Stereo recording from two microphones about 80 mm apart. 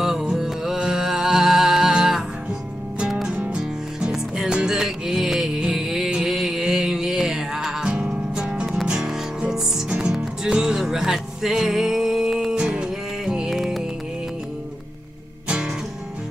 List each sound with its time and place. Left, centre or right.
0.0 s music: centre
3.3 s music: centre
15.4 s music: centre